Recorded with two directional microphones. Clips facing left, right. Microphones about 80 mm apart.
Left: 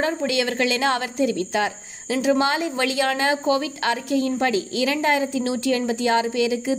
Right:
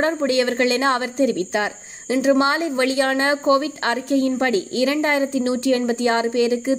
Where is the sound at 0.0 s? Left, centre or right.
Right.